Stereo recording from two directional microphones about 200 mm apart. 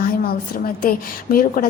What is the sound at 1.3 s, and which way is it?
Speech, 50° left (ahead or behind).